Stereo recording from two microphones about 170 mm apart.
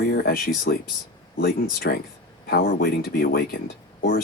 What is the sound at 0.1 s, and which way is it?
Speech, 60° left (ahead or behind).